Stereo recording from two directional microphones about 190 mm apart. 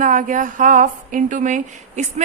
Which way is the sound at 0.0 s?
45° right (ahead or behind).